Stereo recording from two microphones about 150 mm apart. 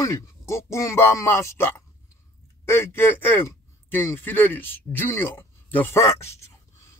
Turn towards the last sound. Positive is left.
turn(degrees=20)  # may be behind; listen again after turning